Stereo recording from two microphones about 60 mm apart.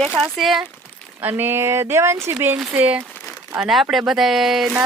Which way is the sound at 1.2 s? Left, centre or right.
Right.